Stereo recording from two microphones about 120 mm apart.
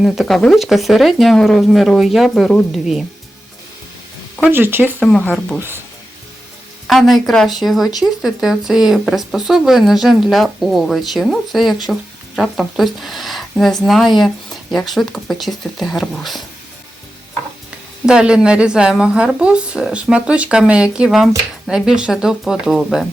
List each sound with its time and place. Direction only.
0.0 s speech: centre (ahead or behind)
4.4 s speech: 15° right (ahead or behind)
5.0 s speech: 5° left (ahead or behind)
6.8 s speech: centre (ahead or behind)
18.0 s speech: 5° right (ahead or behind)